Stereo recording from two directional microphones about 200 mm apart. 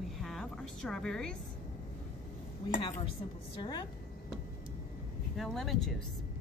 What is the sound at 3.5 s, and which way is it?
Speech, 20° left (ahead or behind).